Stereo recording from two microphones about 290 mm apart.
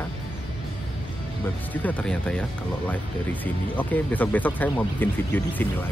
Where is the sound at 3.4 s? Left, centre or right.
Centre.